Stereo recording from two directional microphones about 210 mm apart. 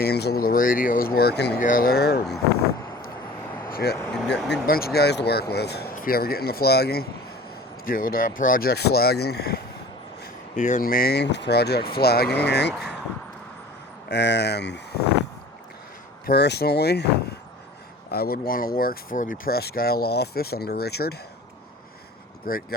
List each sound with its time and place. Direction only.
0.0 s speech: 50° left (ahead or behind)
3.7 s vehicle: 45° left (ahead or behind)
3.9 s speech: 10° left (ahead or behind)
4.6 s speech: 45° left (ahead or behind)
10.5 s speech: 35° left (ahead or behind); by 12.7 s 55° left (ahead or behind)
14.1 s speech: 55° left (ahead or behind)
16.2 s speech: 50° left (ahead or behind)
22.5 s speech: 45° left (ahead or behind)